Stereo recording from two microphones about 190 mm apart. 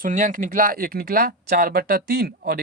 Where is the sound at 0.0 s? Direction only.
45° right (ahead or behind).